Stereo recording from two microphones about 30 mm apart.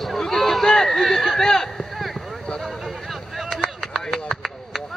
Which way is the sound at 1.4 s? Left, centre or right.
Centre.